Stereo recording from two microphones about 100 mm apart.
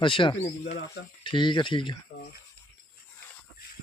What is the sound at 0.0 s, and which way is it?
Speech, 60° left (ahead or behind).